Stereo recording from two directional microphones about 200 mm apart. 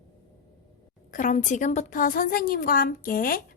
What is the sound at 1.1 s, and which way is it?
A woman's voice, 40° left (ahead or behind).